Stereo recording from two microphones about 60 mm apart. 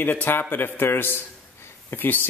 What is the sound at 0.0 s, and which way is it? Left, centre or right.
Speech, left.